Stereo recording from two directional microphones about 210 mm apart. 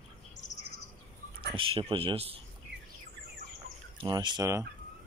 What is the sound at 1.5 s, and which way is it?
Speech, 25° right (ahead or behind).